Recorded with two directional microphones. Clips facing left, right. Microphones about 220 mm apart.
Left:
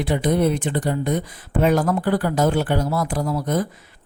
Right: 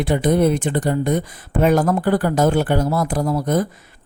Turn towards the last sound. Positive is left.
turn(degrees=-45)  # may be behind; listen again after turning